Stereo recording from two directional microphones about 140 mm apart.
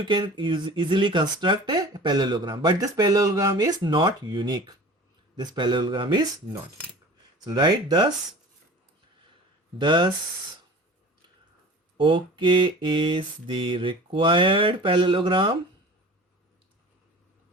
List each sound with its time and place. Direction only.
0.0 s speech: 35° right (ahead or behind)
9.8 s speech: 35° right (ahead or behind)
11.9 s speech: 35° right (ahead or behind)